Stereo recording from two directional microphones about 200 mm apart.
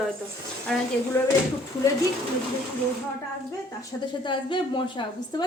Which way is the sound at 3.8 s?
25° left (ahead or behind).